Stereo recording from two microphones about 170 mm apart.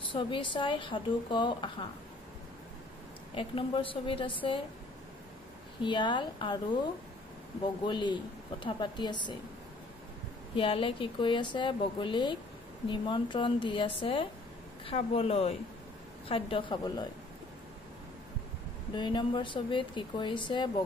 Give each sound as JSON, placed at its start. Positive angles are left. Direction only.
{"t": 0.1, "sound": "speech", "side_deg": 30}
{"t": 3.3, "sound": "a woman's voice", "side_deg": 30}
{"t": 5.8, "sound": "speech", "side_deg": 30}
{"t": 10.5, "sound": "a woman's voice", "side_deg": 30}
{"t": 18.9, "sound": "speech", "side_deg": 25}